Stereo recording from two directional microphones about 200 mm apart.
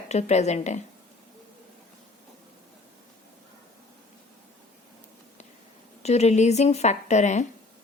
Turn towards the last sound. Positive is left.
turn(degrees=35)  # may be behind; listen again after turning